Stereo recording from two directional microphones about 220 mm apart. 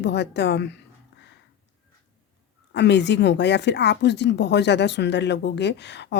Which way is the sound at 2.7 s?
50° left (ahead or behind).